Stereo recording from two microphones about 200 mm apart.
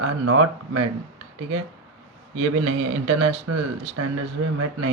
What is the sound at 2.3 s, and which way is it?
Speech, 90° right.